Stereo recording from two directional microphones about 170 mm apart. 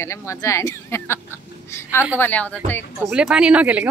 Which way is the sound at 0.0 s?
15° left (ahead or behind).